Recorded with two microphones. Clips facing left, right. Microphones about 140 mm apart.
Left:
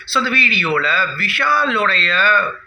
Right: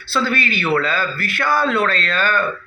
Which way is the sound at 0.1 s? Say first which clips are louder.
Even; 45° right (ahead or behind).